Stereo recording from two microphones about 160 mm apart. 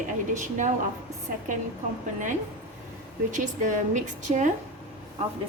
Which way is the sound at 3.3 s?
50° right (ahead or behind).